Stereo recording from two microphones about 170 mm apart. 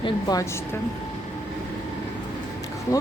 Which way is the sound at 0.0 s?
20° left (ahead or behind).